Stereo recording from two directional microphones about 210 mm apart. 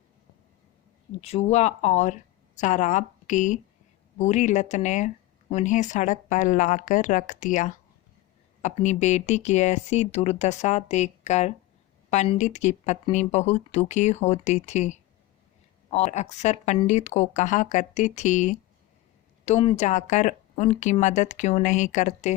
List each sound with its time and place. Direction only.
1.2 s speech: 30° left (ahead or behind)